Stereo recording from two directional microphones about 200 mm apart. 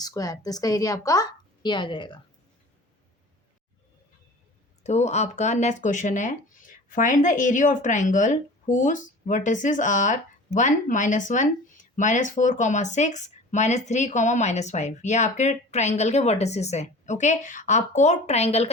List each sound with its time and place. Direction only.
0.0 s a woman's voice: 20° left (ahead or behind)
4.8 s speech: 35° left (ahead or behind)